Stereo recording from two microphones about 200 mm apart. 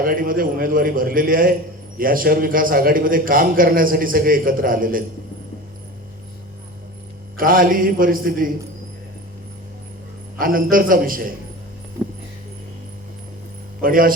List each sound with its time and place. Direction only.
0.0 s a man's voice: 45° right (ahead or behind)
7.3 s a man's voice: 45° right (ahead or behind)
10.3 s a man's voice: 45° right (ahead or behind)
13.8 s a man's voice: 45° right (ahead or behind)